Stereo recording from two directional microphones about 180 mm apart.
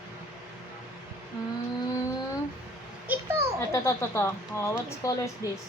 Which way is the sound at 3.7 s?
15° left (ahead or behind).